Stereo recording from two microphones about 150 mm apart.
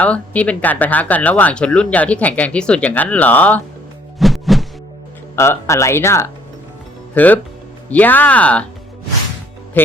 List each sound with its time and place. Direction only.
0.0 s speech: 10° left (ahead or behind)
4.2 s music: centre (ahead or behind)
5.4 s speech: 20° left (ahead or behind)
9.7 s speech: 15° left (ahead or behind)